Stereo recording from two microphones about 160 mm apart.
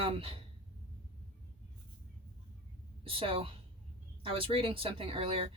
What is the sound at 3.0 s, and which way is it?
Speech, 35° right (ahead or behind).